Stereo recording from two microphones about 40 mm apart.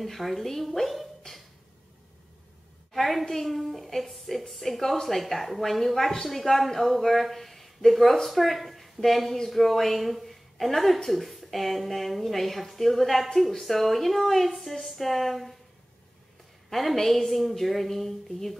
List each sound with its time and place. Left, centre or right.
0.0 s speech: centre
1.3 s a sound: centre
2.9 s speech: centre
16.7 s speech: centre